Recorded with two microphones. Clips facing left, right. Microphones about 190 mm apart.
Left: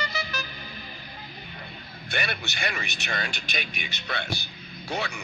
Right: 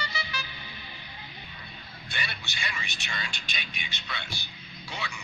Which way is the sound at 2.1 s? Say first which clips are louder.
Left 8 dB; 65° left (ahead or behind).